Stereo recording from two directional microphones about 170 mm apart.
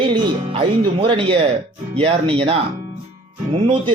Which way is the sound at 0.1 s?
30° right (ahead or behind).